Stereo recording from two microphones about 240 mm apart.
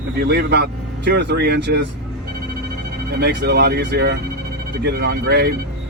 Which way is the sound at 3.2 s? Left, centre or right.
Right.